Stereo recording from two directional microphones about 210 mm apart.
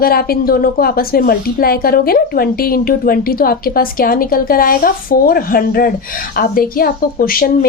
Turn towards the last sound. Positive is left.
turn(degrees=45)  # may be behind; listen again after turning